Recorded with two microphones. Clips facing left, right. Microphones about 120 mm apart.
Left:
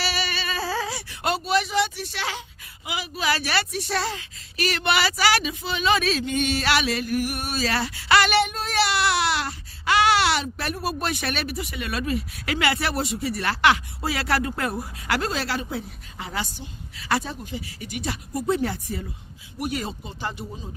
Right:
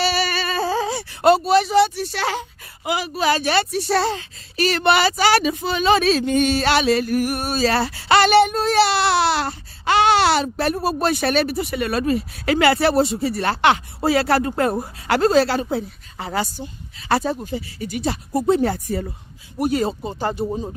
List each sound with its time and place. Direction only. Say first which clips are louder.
0.0 s a sound: right 7 dB; 35° right (ahead or behind)
0.7 s a sound: right 6 dB; 25° right (ahead or behind)
1.2 s child singing: right 9 dB; 35° right (ahead or behind)
2.8 s speech: right 7 dB; 45° right (ahead or behind)
3.3 s child singing: right 7 dB; 25° right (ahead or behind)
5.4 s child singing: right 6 dB; 45° right (ahead or behind); by 7.0 s 30° right (ahead or behind)
7.1 s child singing: right 5 dB; 45° right (ahead or behind); by 18.7 s 30° right (ahead or behind)
18.7 s speech: right 7 dB; 45° right (ahead or behind)
19.5 s child singing: right 9 dB; 35° right (ahead or behind)